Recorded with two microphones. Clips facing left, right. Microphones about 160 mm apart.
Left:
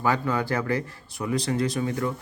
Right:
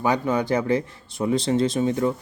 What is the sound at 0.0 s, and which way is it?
Speech, 20° right (ahead or behind).